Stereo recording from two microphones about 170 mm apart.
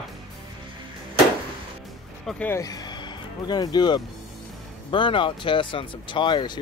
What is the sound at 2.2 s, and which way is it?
Speech, 10° left (ahead or behind).